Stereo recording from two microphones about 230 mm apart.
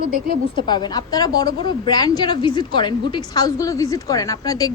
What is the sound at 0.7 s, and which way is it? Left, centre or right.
Speech, centre.